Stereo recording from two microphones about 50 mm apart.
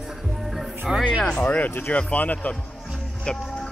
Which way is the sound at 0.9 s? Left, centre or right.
Centre.